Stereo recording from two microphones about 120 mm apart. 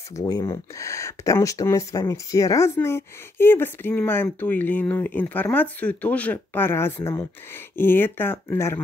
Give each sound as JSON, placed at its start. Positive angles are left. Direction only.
{"t": 0.2, "sound": "speech", "side_deg": 30}